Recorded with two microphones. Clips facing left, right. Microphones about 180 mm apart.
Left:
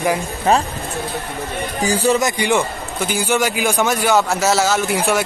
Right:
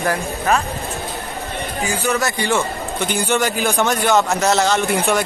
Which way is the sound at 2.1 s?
15° left (ahead or behind).